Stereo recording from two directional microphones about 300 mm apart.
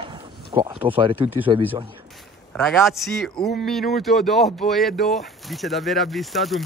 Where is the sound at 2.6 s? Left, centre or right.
Centre.